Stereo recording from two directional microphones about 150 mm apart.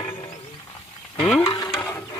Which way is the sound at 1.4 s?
30° left (ahead or behind).